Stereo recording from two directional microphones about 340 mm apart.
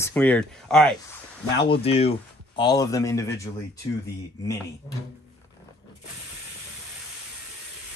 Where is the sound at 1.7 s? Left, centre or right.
Centre.